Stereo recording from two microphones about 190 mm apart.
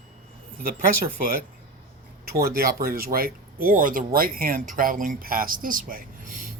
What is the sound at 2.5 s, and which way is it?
Speech, 50° right (ahead or behind).